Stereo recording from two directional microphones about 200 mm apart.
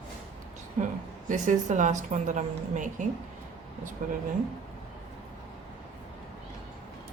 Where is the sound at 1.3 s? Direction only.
40° right (ahead or behind).